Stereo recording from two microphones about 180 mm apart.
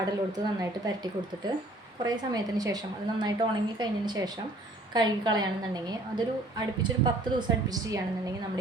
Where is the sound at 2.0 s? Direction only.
20° right (ahead or behind).